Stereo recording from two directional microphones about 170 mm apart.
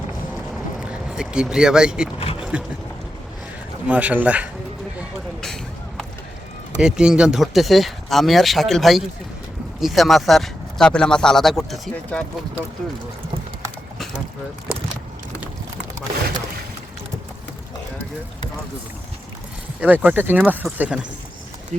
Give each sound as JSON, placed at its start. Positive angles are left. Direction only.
{"t": 0.5, "sound": "vehicle", "side_deg": -5}
{"t": 2.1, "sound": "speech", "side_deg": 35}
{"t": 2.4, "sound": "speech", "side_deg": -5}
{"t": 3.8, "sound": "speech", "side_deg": -10}
{"t": 4.9, "sound": "speech", "side_deg": 0}
{"t": 6.7, "sound": "speech", "side_deg": -5}
{"t": 19.8, "sound": "speech", "side_deg": -10}